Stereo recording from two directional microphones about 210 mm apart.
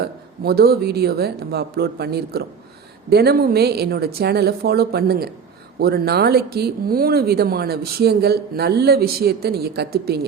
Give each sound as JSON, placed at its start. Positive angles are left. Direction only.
{"t": 0.4, "sound": "speech", "side_deg": -50}